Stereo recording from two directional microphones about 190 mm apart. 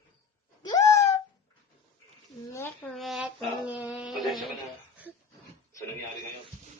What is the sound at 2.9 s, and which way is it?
Speech, centre (ahead or behind).